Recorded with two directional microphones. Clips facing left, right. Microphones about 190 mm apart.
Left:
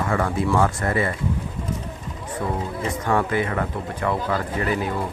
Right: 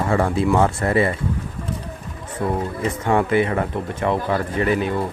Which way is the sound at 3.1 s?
20° right (ahead or behind).